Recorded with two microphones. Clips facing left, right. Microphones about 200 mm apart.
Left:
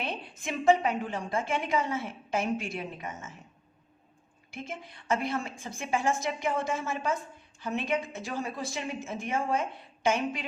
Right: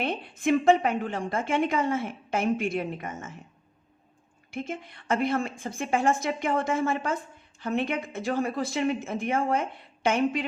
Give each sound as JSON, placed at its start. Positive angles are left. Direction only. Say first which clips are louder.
{"t": 0.0, "sound": "a woman's voice", "louder": "right 8 dB", "side_deg": -55}
{"t": 4.5, "sound": "a woman's voice", "louder": "right 6 dB", "side_deg": -55}